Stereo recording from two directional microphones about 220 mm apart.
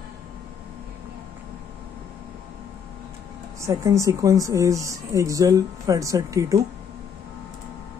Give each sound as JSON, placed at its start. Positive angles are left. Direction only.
{"t": 3.6, "sound": "a woman's voice", "side_deg": -15}